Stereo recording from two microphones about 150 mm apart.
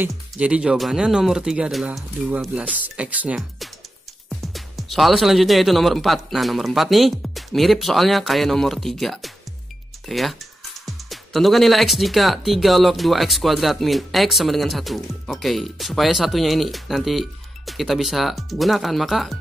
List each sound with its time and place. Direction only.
0.1 s speech: 5° right (ahead or behind)